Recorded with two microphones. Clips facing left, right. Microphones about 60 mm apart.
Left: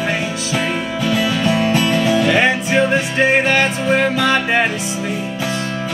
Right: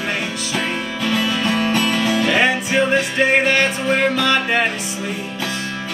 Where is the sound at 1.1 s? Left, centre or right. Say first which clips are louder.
Left 2 dB; centre.